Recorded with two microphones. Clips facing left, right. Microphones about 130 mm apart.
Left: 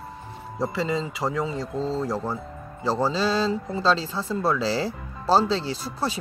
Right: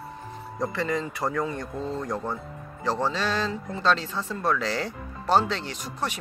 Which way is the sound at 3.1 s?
35° left (ahead or behind).